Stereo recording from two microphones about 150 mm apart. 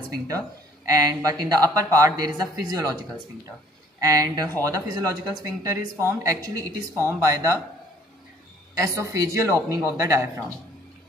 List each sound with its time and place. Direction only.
0.8 s speech: 25° right (ahead or behind)
4.0 s speech: 25° right (ahead or behind)
8.7 s speech: 20° right (ahead or behind)